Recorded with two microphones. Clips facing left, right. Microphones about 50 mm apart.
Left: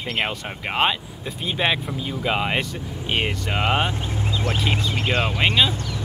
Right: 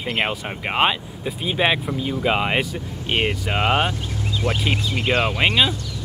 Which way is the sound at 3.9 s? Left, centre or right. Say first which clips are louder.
Even; left.